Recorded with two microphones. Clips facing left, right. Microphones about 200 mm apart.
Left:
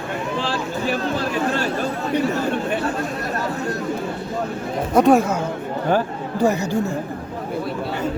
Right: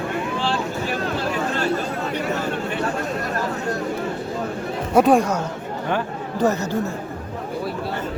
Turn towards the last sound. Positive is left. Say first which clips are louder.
# left 1 dB
turn(degrees=10)  # may be behind; listen again after turning